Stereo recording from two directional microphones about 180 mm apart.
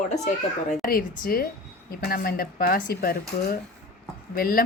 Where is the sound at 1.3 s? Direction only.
55° left (ahead or behind).